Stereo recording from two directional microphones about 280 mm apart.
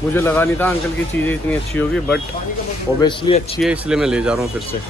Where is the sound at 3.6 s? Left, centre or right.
Centre.